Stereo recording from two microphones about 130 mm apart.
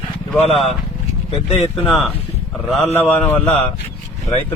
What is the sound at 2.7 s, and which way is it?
Speech, 50° left (ahead or behind).